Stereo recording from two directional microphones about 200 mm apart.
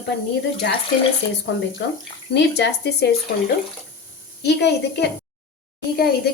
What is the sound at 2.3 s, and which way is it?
Speech, 60° left (ahead or behind).